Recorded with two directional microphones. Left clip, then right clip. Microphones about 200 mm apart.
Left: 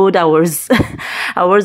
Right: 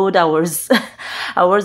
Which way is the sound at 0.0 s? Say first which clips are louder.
Left 3 dB; 15° left (ahead or behind).